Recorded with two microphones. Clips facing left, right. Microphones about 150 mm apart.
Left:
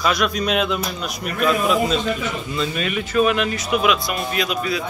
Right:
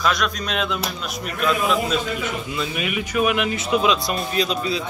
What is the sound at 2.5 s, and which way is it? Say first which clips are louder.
Speech: left 2 dB; 10° right (ahead or behind).